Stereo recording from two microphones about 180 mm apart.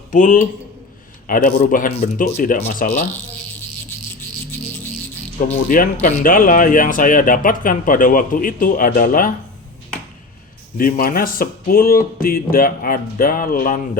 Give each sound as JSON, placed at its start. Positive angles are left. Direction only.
{"t": 0.1, "sound": "speech", "side_deg": 45}
{"t": 5.6, "sound": "speech", "side_deg": 50}
{"t": 10.8, "sound": "speech", "side_deg": 50}